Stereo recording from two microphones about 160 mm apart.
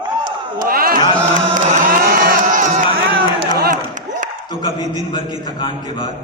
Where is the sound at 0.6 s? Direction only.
65° right (ahead or behind).